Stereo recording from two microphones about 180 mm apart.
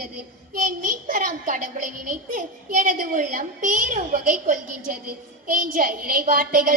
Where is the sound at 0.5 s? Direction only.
50° right (ahead or behind).